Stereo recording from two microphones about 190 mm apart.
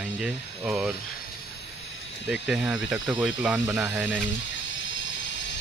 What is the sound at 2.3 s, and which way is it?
Speech, 5° right (ahead or behind).